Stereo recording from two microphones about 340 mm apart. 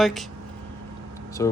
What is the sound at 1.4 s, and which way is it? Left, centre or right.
Speech, centre.